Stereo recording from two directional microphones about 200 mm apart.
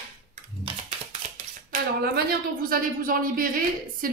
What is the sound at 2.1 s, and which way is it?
Speech, 50° right (ahead or behind).